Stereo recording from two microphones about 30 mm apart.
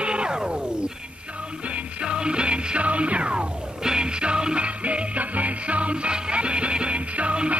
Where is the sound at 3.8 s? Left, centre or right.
Right.